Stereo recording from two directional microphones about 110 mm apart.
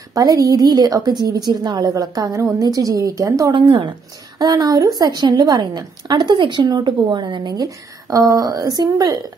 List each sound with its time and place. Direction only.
0.1 s a woman's voice: 35° right (ahead or behind)
3.5 s speech: 50° right (ahead or behind)
4.4 s a woman's voice: 35° right (ahead or behind)